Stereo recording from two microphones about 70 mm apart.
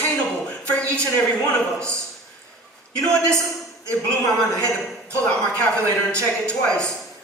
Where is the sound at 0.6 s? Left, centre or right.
Centre.